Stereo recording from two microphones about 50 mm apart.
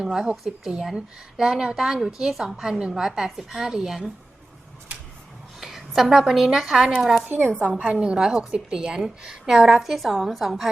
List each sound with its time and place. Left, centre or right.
0.0 s speech: centre
5.5 s a woman's voice: centre
7.5 s a woman's voice: right
7.9 s speech: centre